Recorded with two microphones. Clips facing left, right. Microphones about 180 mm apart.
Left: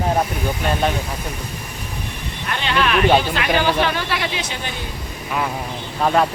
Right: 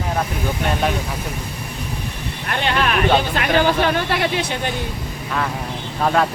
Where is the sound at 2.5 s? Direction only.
50° right (ahead or behind).